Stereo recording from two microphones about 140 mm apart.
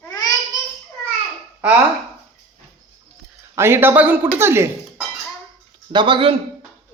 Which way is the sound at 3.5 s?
15° right (ahead or behind).